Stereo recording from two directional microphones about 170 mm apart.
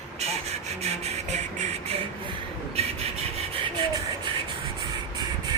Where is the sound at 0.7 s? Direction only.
40° right (ahead or behind).